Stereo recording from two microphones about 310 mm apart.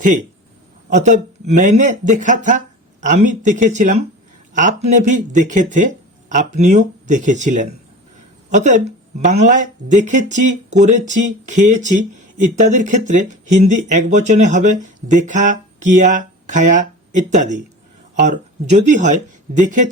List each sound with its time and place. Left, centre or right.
0.9 s speech: right